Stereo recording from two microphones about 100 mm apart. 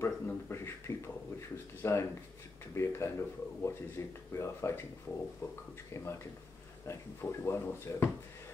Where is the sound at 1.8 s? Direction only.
25° left (ahead or behind).